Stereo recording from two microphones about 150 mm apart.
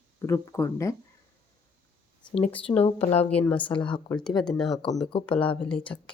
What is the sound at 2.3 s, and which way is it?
Speech, 40° left (ahead or behind).